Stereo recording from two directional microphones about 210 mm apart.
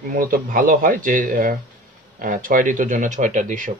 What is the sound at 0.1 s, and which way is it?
Speech, 40° right (ahead or behind).